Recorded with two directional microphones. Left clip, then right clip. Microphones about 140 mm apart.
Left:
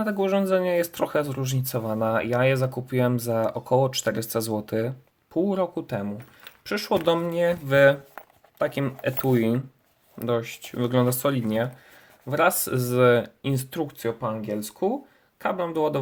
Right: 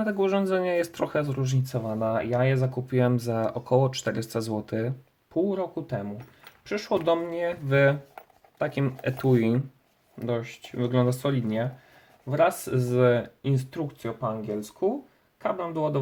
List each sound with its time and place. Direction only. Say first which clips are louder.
0.0 s speech: left 1 dB; 15° left (ahead or behind); by 7.9 s 30° left (ahead or behind)
8.5 s speech: left 3 dB; 20° left (ahead or behind)
10.2 s speech: left 4 dB; 35° left (ahead or behind)